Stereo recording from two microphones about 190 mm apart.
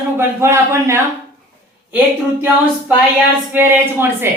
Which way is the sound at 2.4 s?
10° right (ahead or behind).